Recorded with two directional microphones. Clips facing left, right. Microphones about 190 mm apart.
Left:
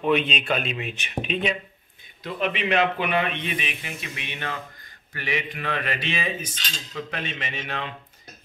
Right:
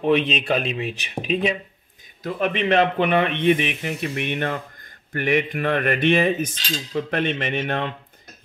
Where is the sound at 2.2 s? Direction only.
45° right (ahead or behind).